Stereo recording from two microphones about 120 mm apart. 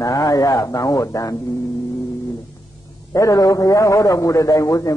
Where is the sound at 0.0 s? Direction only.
30° left (ahead or behind).